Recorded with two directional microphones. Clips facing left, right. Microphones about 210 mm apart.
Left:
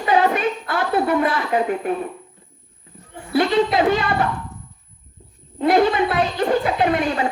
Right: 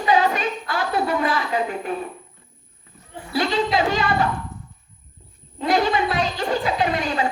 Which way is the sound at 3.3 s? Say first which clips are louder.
Left 4 dB; 55° left (ahead or behind).